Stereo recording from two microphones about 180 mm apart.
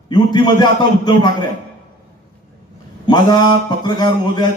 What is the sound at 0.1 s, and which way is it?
A man's voice, 25° left (ahead or behind).